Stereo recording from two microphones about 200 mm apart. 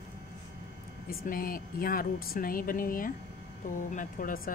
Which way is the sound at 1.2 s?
45° left (ahead or behind).